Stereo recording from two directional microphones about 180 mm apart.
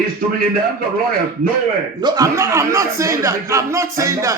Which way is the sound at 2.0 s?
20° right (ahead or behind).